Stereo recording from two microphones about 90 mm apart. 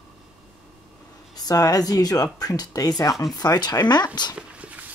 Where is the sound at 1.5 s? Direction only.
45° left (ahead or behind).